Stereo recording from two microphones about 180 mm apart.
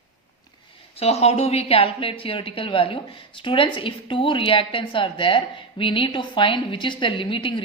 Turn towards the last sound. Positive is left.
turn(degrees=30)  # may be behind; listen again after turning